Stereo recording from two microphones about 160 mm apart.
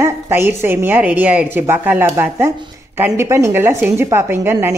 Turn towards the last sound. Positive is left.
turn(degrees=-15)  # may be behind; listen again after turning